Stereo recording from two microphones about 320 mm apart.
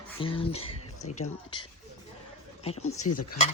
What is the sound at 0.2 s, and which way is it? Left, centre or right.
Speech, centre.